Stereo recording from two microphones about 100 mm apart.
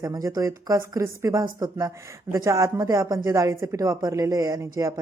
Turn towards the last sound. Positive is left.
turn(degrees=-35)  # may be behind; listen again after turning